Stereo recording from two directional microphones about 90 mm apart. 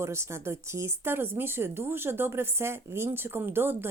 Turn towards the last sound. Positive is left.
turn(degrees=-25)  # may be behind; listen again after turning